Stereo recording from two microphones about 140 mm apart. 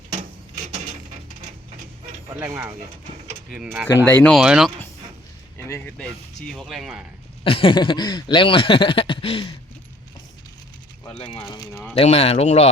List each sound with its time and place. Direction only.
4.0 s speech: 10° left (ahead or behind)
4.4 s speech: 5° right (ahead or behind)
5.5 s a sound: 20° left (ahead or behind)
6.0 s speech: 5° left (ahead or behind)
7.4 s speech: 40° left (ahead or behind)
11.0 s speech: 35° left (ahead or behind)
11.7 s speech: 10° left (ahead or behind)
11.9 s speech: 45° left (ahead or behind)